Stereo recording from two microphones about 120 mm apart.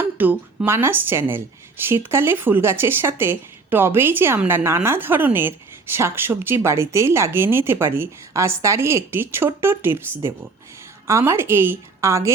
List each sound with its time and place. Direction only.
0.2 s a woman's voice: 15° right (ahead or behind)